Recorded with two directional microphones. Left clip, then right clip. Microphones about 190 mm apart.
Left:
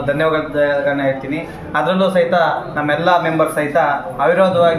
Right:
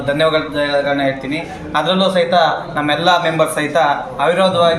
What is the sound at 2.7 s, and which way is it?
A man's voice, 20° right (ahead or behind).